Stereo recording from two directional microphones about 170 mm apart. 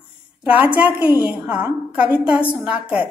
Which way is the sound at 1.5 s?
10° right (ahead or behind).